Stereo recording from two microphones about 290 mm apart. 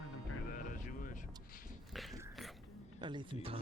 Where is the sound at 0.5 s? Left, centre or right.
Left.